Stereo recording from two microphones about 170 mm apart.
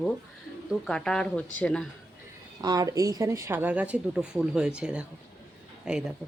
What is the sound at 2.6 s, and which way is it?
A woman's voice, 25° right (ahead or behind).